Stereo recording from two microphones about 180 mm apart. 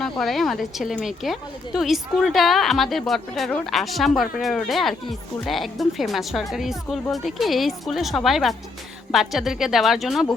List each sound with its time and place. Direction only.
0.0 s a woman's voice: centre (ahead or behind)